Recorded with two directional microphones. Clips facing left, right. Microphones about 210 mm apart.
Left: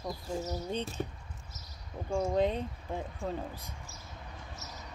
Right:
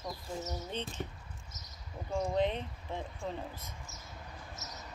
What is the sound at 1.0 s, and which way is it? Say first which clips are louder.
Speech: left 4 dB; 30° left (ahead or behind).